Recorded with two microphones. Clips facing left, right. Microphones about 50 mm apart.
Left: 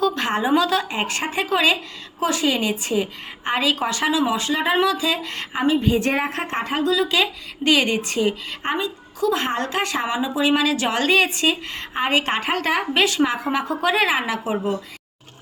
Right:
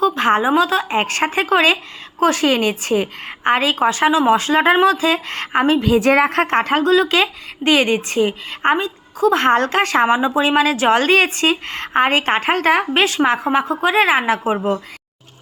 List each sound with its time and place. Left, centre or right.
0.2 s a woman's voice: right
0.4 s a woman's voice: right
0.9 s a woman's voice: right
5.7 s a woman's voice: right
7.6 s a woman's voice: right
9.4 s a woman's voice: right
10.1 s speech: right